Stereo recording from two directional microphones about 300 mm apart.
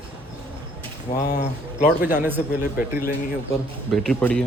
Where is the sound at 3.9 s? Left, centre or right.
Centre.